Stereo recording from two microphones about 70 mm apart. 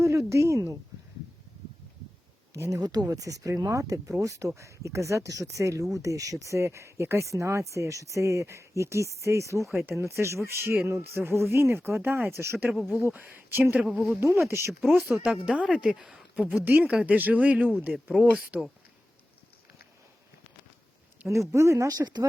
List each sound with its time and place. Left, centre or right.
0.0 s a sound: right
2.6 s speech: right
12.6 s speech: centre
13.0 s speech: right
13.8 s speech: centre
14.2 s speech: right
14.7 s a woman's voice: centre
16.6 s a woman's voice: right
21.5 s speech: right
21.8 s speech: right